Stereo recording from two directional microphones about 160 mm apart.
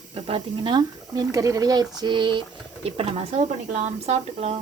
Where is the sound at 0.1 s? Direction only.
35° right (ahead or behind).